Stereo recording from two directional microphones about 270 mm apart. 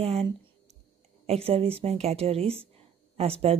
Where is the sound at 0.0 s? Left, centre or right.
Right.